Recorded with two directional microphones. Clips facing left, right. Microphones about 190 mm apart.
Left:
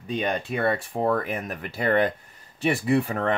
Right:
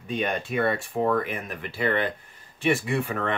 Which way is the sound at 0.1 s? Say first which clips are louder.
Left 1 dB; 35° left (ahead or behind).